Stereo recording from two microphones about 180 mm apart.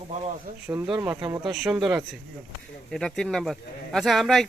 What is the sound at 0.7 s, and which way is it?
Speech, 10° right (ahead or behind).